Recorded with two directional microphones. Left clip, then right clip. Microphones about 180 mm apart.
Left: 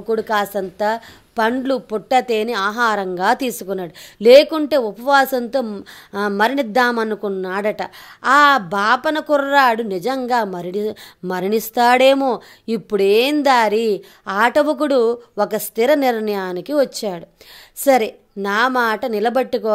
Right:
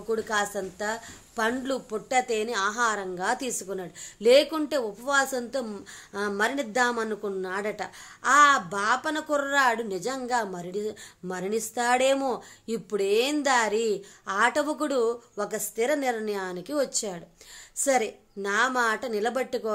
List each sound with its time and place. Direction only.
0.1 s a woman's voice: 45° left (ahead or behind)